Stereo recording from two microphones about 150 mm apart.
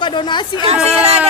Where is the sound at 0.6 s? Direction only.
40° right (ahead or behind).